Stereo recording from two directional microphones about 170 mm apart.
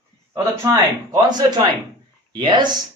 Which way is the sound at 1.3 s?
25° right (ahead or behind).